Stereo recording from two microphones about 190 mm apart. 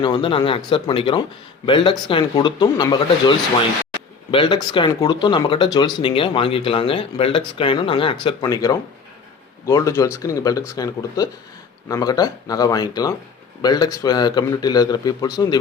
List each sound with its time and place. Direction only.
0.0 s speech: 25° left (ahead or behind)